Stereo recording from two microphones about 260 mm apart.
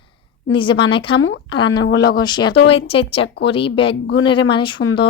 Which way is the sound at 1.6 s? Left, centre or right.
Left.